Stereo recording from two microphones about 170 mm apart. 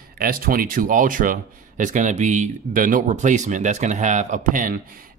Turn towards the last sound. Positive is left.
turn(degrees=-55)  # may be behind; listen again after turning